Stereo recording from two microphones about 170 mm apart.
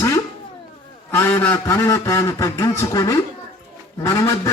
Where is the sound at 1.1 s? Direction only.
10° left (ahead or behind).